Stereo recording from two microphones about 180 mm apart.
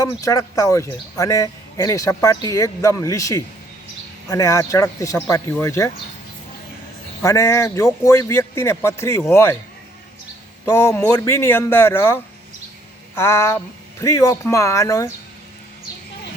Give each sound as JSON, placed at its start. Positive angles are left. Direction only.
{"t": 0.0, "sound": "speech", "side_deg": 20}
{"t": 7.2, "sound": "speech", "side_deg": 15}
{"t": 10.7, "sound": "speech", "side_deg": 15}